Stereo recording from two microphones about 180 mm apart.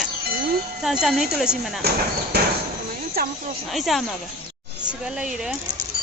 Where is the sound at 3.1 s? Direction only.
55° right (ahead or behind).